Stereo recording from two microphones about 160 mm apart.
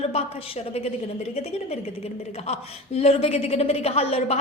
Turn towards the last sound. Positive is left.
turn(degrees=40)  # may be behind; listen again after turning